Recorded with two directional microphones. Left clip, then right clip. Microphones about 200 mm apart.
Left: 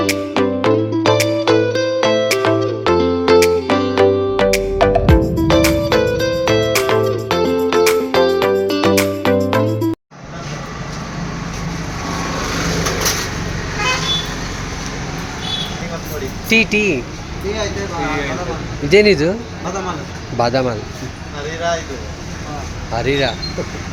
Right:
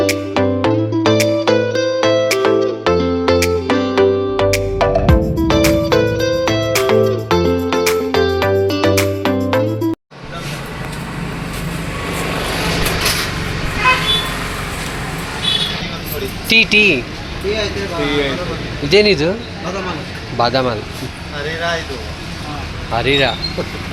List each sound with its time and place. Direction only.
0.0 s music: centre (ahead or behind)
16.5 s speech: 5° left (ahead or behind)
18.9 s speech: 20° left (ahead or behind)
20.4 s speech: 20° left (ahead or behind)
23.0 s speech: 5° left (ahead or behind)